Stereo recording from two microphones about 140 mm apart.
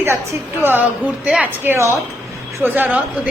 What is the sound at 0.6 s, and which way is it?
A woman's voice, 15° right (ahead or behind).